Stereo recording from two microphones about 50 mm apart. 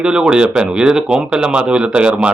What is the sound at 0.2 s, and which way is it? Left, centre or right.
Speech, centre.